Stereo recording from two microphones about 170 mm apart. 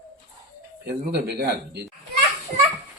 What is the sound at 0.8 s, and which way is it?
Speech, 75° right (ahead or behind).